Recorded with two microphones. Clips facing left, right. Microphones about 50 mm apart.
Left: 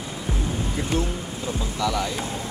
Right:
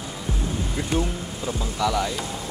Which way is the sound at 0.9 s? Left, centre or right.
Centre.